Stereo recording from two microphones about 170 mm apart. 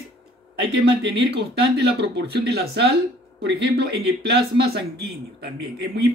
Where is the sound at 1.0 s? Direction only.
85° right.